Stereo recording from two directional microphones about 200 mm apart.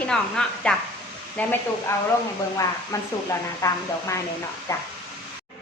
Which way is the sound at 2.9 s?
15° left (ahead or behind).